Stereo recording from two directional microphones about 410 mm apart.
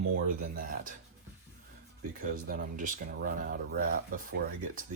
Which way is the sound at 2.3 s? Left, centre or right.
Right.